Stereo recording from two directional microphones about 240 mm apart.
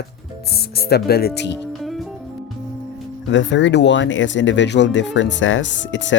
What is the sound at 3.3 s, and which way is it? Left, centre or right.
Speech, left.